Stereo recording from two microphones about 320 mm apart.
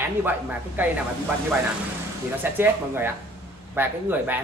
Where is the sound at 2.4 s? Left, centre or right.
Centre.